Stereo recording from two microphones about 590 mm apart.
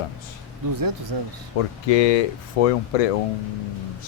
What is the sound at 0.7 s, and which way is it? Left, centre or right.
Speech, right.